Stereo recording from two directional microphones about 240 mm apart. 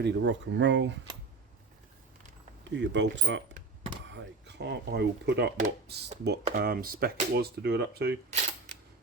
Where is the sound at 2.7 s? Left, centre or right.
Right.